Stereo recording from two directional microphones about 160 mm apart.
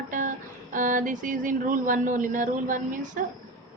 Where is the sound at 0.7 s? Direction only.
55° right (ahead or behind).